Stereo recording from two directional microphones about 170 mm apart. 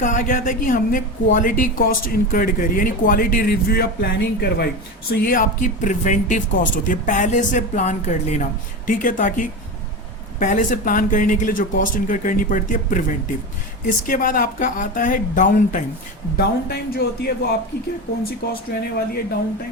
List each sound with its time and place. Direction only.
0.0 s speech: 50° left (ahead or behind)
5.1 s speech: 55° left (ahead or behind)
16.4 s speech: 65° left (ahead or behind)